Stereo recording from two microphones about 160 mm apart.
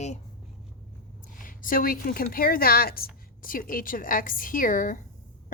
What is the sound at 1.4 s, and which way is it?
A woman's voice, 60° left (ahead or behind).